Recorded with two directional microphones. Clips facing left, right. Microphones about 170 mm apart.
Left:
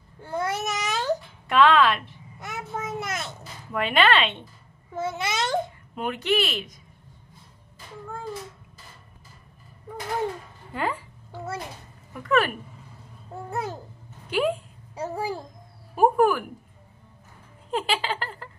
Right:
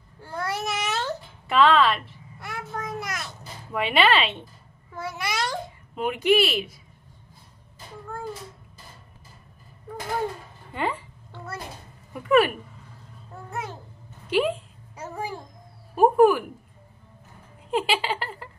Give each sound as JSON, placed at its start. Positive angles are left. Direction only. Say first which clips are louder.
{"t": 0.2, "sound": "babbling", "louder": "left 2 dB", "side_deg": 20}
{"t": 1.5, "sound": "a woman's voice", "louder": "even", "side_deg": 0}
{"t": 2.4, "sound": "a sound", "louder": "left 1 dB", "side_deg": 20}
{"t": 3.7, "sound": "speech", "louder": "even", "side_deg": -5}
{"t": 4.9, "sound": "a child's voice", "louder": "left 2 dB", "side_deg": 25}
{"t": 5.9, "sound": "speech", "louder": "right 4 dB", "side_deg": -10}
{"t": 10.7, "sound": "speech", "louder": "even", "side_deg": 0}
{"t": 12.1, "sound": "a sound", "louder": "right 4 dB", "side_deg": -10}
{"t": 13.5, "sound": "a child's voice", "louder": "left 3 dB", "side_deg": 35}
{"t": 14.3, "sound": "a woman's voice", "louder": "right 1 dB", "side_deg": 0}
{"t": 15.0, "sound": "a child's voice", "louder": "left 4 dB", "side_deg": 35}
{"t": 15.9, "sound": "music", "louder": "right 3 dB", "side_deg": -5}
{"t": 17.6, "sound": "a sound", "louder": "right 2 dB", "side_deg": -10}